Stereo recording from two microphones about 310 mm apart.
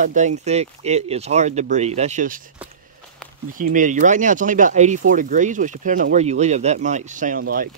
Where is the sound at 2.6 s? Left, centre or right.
Centre.